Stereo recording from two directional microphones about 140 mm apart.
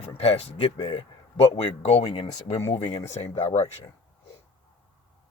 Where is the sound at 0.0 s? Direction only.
45° left (ahead or behind).